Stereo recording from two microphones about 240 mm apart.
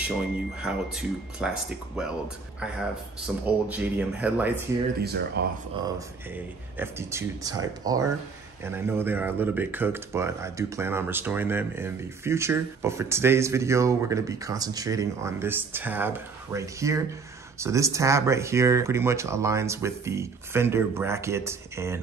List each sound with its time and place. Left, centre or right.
0.7 s speech: centre
5.0 s speech: right
5.9 s speech: centre